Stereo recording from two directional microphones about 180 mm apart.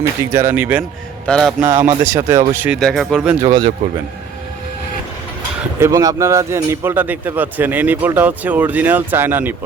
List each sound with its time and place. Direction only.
0.3 s speech: 10° right (ahead or behind)
1.3 s speech: 5° left (ahead or behind)
1.9 s speech: 20° right (ahead or behind)
2.6 s speech: 5° right (ahead or behind)
3.4 s speech: 25° right (ahead or behind)
5.8 s speech: 20° right (ahead or behind)